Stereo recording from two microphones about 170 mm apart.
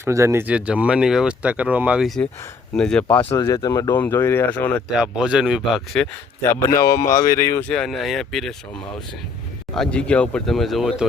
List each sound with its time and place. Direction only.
0.0 s speech: 15° right (ahead or behind); by 3.2 s 10° left (ahead or behind)
3.3 s speech: 20° left (ahead or behind)
4.9 s speech: 5° right (ahead or behind)
6.4 s speech: 15° left (ahead or behind)
9.7 s speech: 5° left (ahead or behind)